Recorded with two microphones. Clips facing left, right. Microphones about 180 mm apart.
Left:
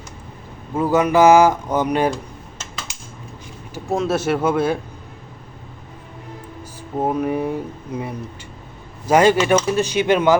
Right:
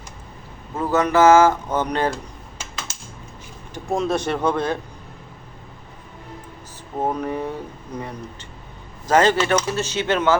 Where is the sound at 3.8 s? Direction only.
Centre (ahead or behind).